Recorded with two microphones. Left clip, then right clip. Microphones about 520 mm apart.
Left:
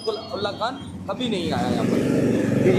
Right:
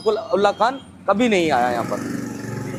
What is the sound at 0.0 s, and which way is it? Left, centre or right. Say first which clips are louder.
A man's voice: right 9 dB; right.